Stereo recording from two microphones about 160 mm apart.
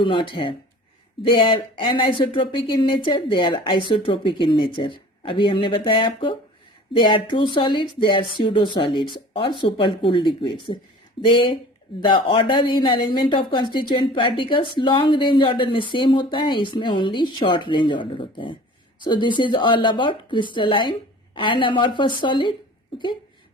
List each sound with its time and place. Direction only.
0.0 s speech: 30° left (ahead or behind)